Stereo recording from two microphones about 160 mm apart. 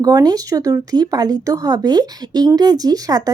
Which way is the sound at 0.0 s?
25° right (ahead or behind).